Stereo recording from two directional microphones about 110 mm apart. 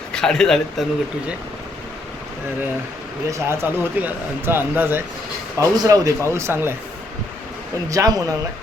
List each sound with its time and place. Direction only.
0.1 s speech: 5° left (ahead or behind)
3.2 s speech: 25° right (ahead or behind)
5.5 s speech: 35° right (ahead or behind)
6.2 s speech: 25° right (ahead or behind)
7.9 s speech: 30° right (ahead or behind)